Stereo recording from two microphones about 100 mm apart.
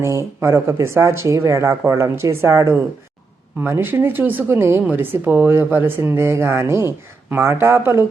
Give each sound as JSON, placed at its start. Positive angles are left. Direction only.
{"t": 0.0, "sound": "speech", "side_deg": -30}